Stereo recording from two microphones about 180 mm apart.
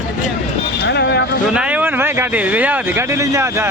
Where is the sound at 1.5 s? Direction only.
5° right (ahead or behind).